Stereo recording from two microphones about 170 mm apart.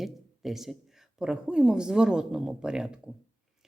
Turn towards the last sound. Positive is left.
turn(degrees=-5)  # may be behind; listen again after turning